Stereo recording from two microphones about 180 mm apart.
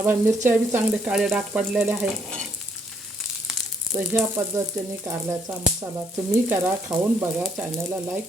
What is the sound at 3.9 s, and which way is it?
Speech, 20° right (ahead or behind).